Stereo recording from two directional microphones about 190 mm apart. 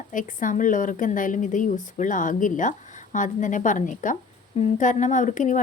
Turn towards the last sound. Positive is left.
turn(degrees=40)  # may be behind; listen again after turning